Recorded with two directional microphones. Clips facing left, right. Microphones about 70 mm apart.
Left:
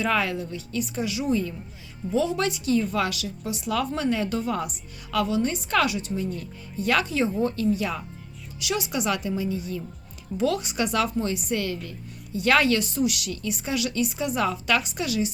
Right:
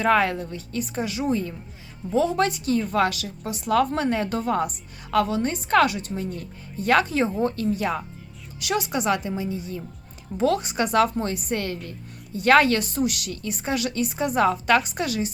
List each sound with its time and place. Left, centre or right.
0.0 s a woman's voice: right